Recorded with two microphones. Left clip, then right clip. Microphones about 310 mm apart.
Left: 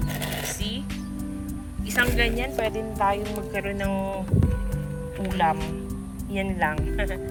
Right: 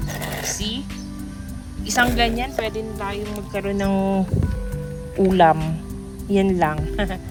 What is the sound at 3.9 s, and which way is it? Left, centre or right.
Speech, right.